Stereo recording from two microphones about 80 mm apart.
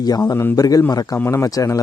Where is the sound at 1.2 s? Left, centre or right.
Left.